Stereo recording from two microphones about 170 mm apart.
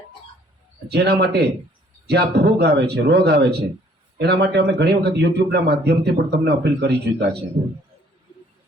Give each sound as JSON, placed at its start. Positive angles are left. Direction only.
{"t": 0.9, "sound": "speech", "side_deg": -75}